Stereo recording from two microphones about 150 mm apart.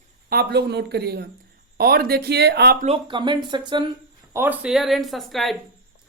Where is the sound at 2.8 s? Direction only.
35° right (ahead or behind).